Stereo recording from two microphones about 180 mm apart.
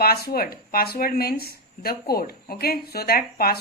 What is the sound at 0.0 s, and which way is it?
Speech, 55° left (ahead or behind).